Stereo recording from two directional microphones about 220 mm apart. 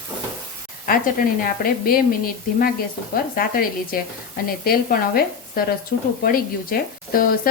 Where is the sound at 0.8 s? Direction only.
40° left (ahead or behind).